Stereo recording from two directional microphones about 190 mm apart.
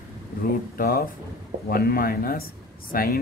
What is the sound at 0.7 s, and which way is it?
Speech, 50° left (ahead or behind).